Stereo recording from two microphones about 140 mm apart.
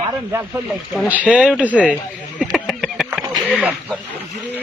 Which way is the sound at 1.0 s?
10° right (ahead or behind).